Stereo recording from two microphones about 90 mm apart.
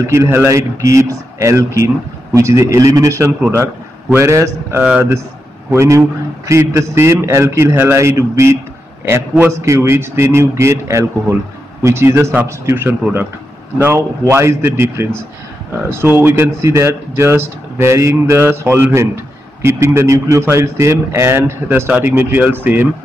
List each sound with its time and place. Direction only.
0.0 s a man's voice: 30° right (ahead or behind)
3.4 s a man's voice: 25° right (ahead or behind)